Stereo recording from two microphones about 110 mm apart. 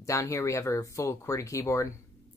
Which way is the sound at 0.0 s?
25° left (ahead or behind).